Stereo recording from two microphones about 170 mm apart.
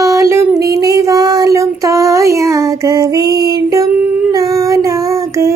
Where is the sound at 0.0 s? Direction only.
20° right (ahead or behind).